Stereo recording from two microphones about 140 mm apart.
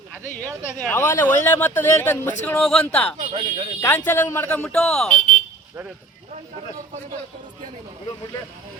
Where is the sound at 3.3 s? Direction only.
40° right (ahead or behind).